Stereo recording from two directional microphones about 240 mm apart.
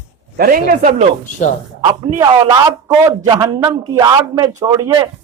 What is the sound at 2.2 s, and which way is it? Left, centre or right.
A man's voice, centre.